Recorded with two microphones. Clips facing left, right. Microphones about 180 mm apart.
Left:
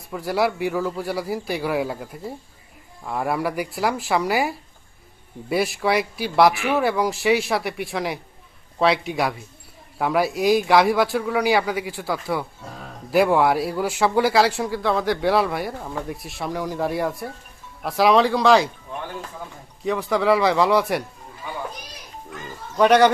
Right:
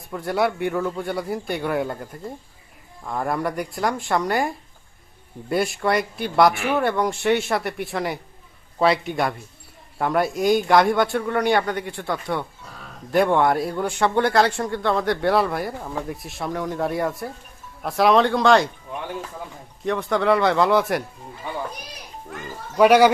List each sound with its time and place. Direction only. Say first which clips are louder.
0.1 s a man's voice: even; centre (ahead or behind)
19.8 s a man's voice: even; centre (ahead or behind)
22.8 s a man's voice: right 1 dB; 10° right (ahead or behind)